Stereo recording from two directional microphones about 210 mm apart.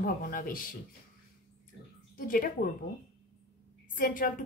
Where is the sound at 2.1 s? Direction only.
40° left (ahead or behind).